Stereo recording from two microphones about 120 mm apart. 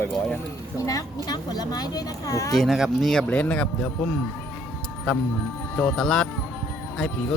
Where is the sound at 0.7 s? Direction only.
30° left (ahead or behind).